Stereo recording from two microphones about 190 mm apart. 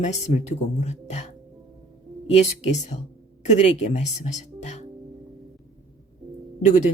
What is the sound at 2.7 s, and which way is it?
A woman's voice, 35° left (ahead or behind).